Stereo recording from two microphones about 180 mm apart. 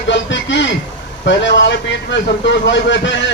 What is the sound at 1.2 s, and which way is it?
A man's voice, 75° left (ahead or behind).